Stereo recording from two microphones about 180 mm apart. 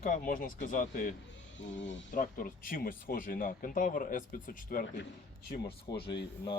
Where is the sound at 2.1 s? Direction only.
50° left (ahead or behind).